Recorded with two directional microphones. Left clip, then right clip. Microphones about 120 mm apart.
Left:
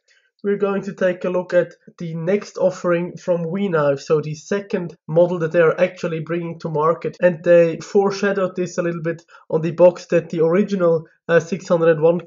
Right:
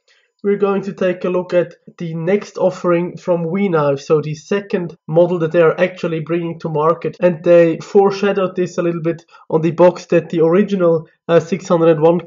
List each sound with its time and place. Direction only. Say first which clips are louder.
0.4 s speech: right 4 dB; 20° right (ahead or behind)
7.2 s speech: right 3 dB; 25° right (ahead or behind)